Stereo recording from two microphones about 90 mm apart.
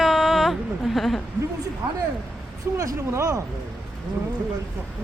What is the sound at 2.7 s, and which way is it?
Speech, 40° right (ahead or behind).